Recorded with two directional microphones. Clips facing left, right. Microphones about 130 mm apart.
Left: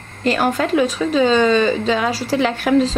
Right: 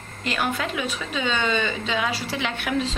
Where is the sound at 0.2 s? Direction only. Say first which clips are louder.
Left 9 dB; 40° left (ahead or behind).